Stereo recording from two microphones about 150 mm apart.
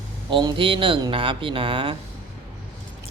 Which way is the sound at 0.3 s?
35° right (ahead or behind).